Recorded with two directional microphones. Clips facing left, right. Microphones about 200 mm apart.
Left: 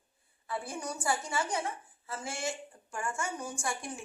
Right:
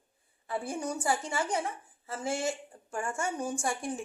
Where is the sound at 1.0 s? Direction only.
30° right (ahead or behind).